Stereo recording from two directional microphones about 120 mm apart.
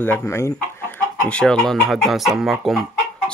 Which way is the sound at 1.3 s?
10° left (ahead or behind).